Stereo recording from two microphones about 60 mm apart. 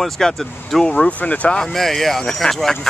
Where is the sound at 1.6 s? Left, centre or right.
Centre.